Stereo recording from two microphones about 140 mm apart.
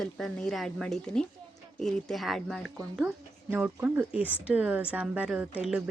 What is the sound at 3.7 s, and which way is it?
Speech, 10° right (ahead or behind).